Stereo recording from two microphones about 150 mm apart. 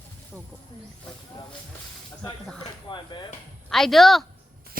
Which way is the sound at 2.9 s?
30° left (ahead or behind).